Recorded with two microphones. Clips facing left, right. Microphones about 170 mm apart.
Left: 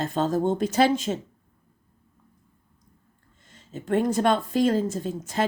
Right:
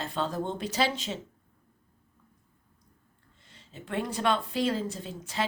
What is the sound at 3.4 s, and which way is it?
Speech, 45° left (ahead or behind).